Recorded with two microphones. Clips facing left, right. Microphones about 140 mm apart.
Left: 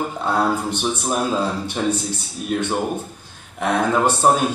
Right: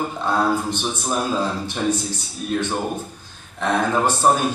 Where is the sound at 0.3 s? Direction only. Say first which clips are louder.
Even; 15° left (ahead or behind).